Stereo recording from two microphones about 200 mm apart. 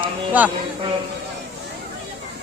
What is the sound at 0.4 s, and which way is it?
Speech, 10° right (ahead or behind).